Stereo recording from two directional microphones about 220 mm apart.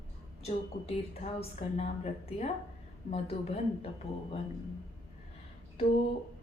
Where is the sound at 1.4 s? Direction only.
30° left (ahead or behind).